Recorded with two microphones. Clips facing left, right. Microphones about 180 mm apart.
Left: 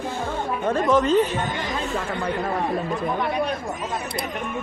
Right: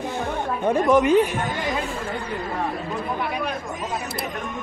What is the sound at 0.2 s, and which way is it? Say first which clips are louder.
Speech: right 1 dB; 15° right (ahead or behind).